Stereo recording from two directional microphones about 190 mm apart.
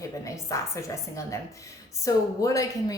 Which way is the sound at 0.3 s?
15° left (ahead or behind).